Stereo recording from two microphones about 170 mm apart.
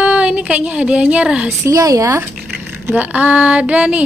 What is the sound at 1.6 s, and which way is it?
A woman's voice, 20° right (ahead or behind).